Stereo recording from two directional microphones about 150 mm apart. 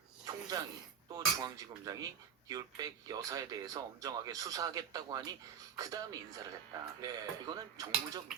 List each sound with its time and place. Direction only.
0.3 s snake: 25° right (ahead or behind)
1.1 s speech: 25° right (ahead or behind)